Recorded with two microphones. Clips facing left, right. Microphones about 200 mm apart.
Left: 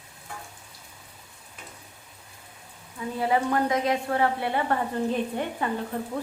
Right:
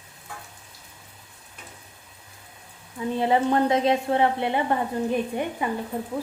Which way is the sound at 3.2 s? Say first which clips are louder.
Right 3 dB; 25° right (ahead or behind).